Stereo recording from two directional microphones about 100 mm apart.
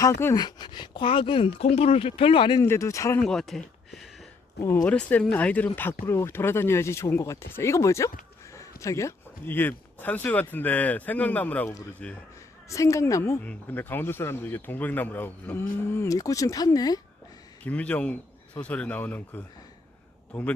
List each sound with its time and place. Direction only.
0.0 s speech: 25° left (ahead or behind)
0.3 s speech: 45° left (ahead or behind); by 2.6 s 60° left (ahead or behind)
2.6 s a woman's voice: 30° left (ahead or behind)
3.2 s speech: 5° left (ahead or behind)
4.9 s speech: 15° left (ahead or behind)
12.7 s a woman's voice: 30° left (ahead or behind)
13.4 s speech: 15° left (ahead or behind); by 17.0 s 40° left (ahead or behind)
17.6 s speech: 15° left (ahead or behind)